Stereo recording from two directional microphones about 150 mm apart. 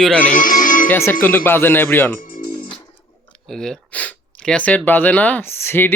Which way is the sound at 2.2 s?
70° left (ahead or behind).